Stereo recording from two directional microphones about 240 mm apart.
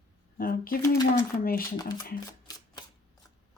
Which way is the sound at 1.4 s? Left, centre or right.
Left.